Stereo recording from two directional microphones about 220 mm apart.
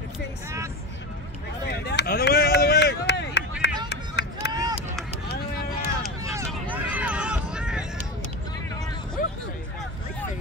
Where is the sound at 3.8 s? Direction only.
50° left (ahead or behind).